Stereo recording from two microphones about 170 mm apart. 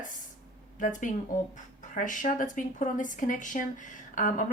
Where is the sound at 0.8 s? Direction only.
50° left (ahead or behind).